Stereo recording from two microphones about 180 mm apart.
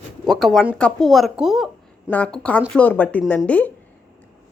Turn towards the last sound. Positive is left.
turn(degrees=10)  # may be behind; listen again after turning